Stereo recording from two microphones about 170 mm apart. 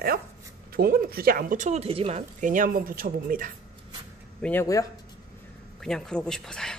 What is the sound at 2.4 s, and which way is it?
A woman's voice, 50° right (ahead or behind).